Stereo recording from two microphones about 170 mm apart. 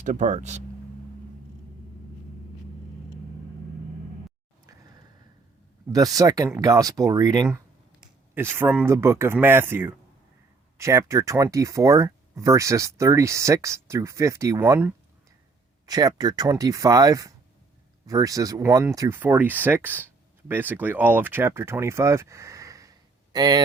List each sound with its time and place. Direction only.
0.0 s speech: 45° right (ahead or behind)
5.9 s speech: 20° right (ahead or behind)